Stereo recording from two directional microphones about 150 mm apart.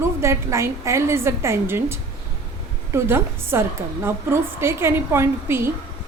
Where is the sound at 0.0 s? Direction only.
20° right (ahead or behind).